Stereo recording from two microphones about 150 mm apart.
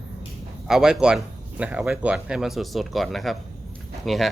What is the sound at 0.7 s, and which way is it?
A man's voice, 5° right (ahead or behind).